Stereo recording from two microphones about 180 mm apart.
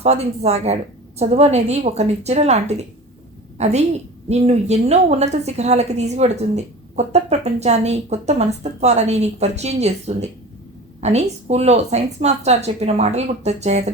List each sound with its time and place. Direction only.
0.0 s a woman's voice: 35° right (ahead or behind)